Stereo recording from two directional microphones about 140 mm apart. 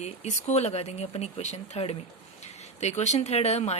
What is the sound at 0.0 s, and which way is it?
Speech, 55° left (ahead or behind).